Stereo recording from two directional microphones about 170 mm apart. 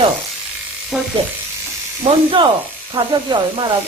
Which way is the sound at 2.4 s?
25° right (ahead or behind).